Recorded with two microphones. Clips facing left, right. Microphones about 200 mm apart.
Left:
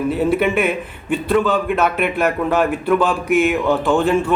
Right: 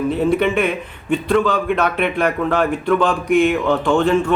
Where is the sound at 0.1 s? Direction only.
5° left (ahead or behind).